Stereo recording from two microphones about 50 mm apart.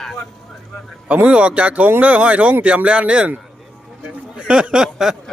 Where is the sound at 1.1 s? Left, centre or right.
Right.